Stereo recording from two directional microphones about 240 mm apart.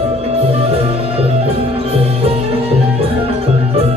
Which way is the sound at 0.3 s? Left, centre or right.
Right.